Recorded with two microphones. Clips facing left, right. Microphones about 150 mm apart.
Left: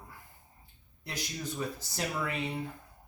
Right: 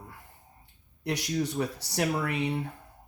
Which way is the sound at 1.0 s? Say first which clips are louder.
Right 10 dB; 70° right (ahead or behind).